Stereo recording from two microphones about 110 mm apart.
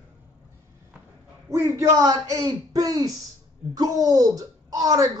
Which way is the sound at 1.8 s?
30° right (ahead or behind).